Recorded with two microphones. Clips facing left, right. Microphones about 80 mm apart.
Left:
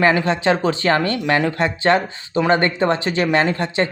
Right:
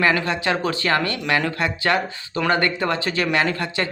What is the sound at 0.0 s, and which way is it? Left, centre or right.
Speech, left.